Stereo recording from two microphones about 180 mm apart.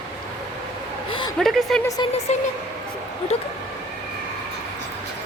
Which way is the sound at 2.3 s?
35° left (ahead or behind).